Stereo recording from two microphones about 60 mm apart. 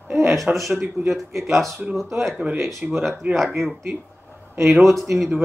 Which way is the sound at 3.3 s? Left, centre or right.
Centre.